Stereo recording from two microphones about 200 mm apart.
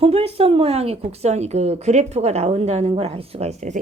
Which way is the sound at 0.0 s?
30° right (ahead or behind).